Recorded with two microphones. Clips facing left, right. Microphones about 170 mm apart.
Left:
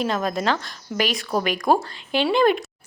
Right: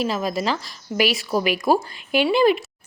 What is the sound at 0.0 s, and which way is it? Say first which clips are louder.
Speech: even; 5° right (ahead or behind).